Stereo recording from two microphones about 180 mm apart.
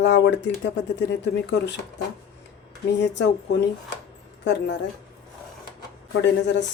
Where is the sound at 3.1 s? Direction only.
75° left (ahead or behind).